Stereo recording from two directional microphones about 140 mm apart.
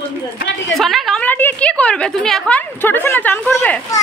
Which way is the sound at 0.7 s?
Centre (ahead or behind).